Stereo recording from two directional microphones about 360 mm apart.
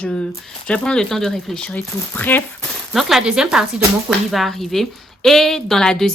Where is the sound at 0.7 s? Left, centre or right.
Centre.